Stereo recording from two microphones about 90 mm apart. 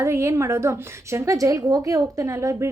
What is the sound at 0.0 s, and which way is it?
A woman's voice, 30° right (ahead or behind).